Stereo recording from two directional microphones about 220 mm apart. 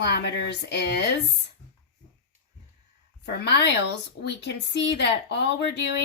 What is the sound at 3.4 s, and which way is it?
Speech, 50° left (ahead or behind).